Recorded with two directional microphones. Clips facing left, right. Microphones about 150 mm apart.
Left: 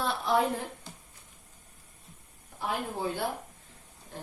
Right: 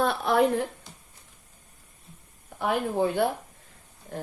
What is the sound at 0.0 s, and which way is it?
Speech, 60° right (ahead or behind).